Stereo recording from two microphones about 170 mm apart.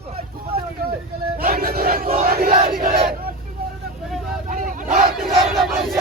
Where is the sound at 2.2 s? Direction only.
60° right (ahead or behind).